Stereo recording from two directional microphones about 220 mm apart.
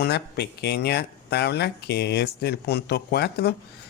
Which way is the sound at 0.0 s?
50° left (ahead or behind).